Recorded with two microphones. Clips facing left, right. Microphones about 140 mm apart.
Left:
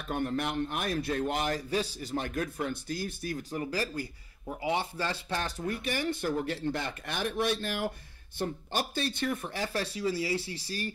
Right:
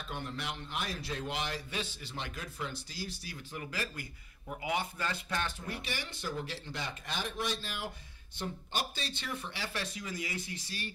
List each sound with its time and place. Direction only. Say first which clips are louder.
0.1 s a man's voice: left 10 dB; 50° left (ahead or behind); by 5.5 s 35° left (ahead or behind)
5.7 s speech: left 9 dB; 50° left (ahead or behind)